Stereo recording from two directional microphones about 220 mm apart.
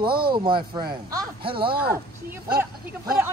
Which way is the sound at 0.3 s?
20° right (ahead or behind).